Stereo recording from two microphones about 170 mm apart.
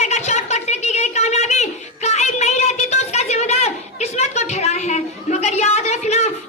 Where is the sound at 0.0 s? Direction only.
40° left (ahead or behind).